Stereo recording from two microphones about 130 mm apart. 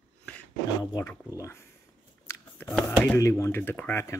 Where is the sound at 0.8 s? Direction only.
25° left (ahead or behind).